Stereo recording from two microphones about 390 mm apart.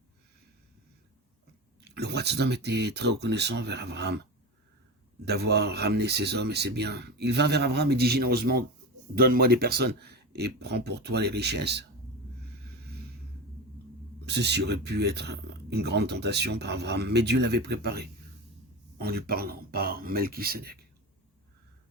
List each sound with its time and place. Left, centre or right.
1.8 s speech: right
5.2 s speech: right
14.3 s speech: right